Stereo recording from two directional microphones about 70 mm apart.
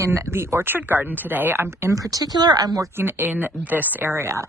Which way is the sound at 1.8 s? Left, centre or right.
Right.